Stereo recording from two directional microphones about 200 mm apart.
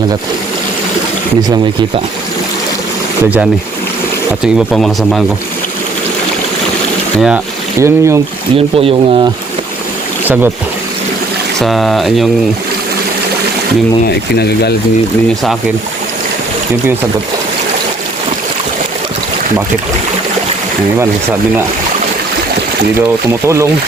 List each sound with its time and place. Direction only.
4.7 s speech: centre (ahead or behind)
7.2 s speech: 5° right (ahead or behind)
8.5 s speech: 30° right (ahead or behind)
11.6 s speech: centre (ahead or behind)
14.3 s speech: 55° left (ahead or behind)